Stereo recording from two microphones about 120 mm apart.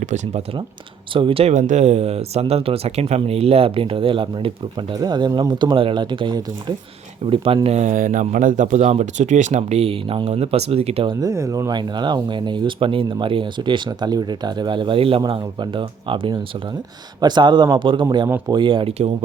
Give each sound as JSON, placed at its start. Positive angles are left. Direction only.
{"t": 0.0, "sound": "speech", "side_deg": -80}
{"t": 1.1, "sound": "speech", "side_deg": -50}
{"t": 1.5, "sound": "speech", "side_deg": -85}
{"t": 7.3, "sound": "speech", "side_deg": -50}
{"t": 7.8, "sound": "speech", "side_deg": -90}
{"t": 11.2, "sound": "speech", "side_deg": -25}